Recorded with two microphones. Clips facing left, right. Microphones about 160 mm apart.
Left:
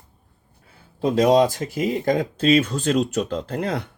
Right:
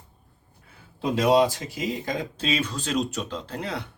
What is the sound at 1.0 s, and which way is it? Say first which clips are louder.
Speech: left 4 dB; 45° left (ahead or behind).